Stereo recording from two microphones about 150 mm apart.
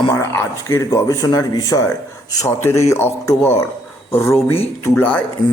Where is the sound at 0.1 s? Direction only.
15° left (ahead or behind).